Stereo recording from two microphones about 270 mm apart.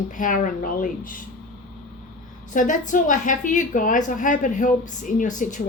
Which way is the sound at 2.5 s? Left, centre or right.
Left.